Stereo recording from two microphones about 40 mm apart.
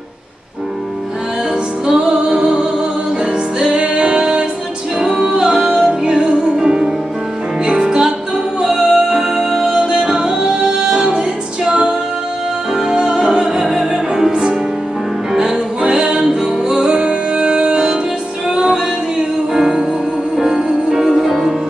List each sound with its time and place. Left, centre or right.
1.9 s music: centre
9.8 s music: centre